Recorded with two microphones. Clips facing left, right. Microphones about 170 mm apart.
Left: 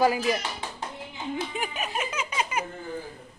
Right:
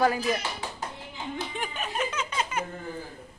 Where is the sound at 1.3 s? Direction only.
10° left (ahead or behind).